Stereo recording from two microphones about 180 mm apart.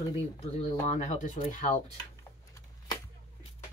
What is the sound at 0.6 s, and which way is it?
Speech, 40° left (ahead or behind).